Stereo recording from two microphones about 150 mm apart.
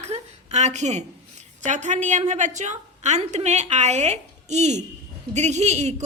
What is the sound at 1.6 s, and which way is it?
A woman's voice, 55° right (ahead or behind).